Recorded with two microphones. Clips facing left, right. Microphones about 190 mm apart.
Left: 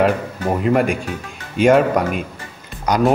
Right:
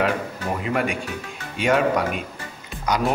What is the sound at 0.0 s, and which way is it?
Speech, 45° left (ahead or behind).